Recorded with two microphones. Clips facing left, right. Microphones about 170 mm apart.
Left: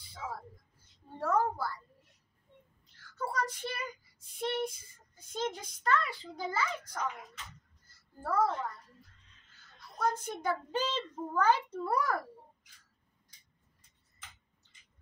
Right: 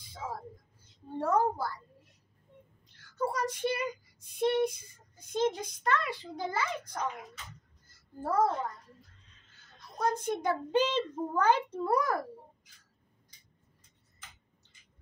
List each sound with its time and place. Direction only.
1.2 s a child's voice: 20° right (ahead or behind)
3.2 s a child's voice: 15° right (ahead or behind)
8.2 s a child's voice: 20° right (ahead or behind)
9.9 s a child's voice: 20° right (ahead or behind)